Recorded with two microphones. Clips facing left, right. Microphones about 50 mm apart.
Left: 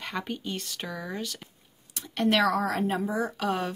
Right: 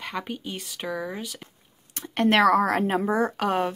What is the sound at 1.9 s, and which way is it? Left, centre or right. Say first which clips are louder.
A woman's voice: right 4 dB; right.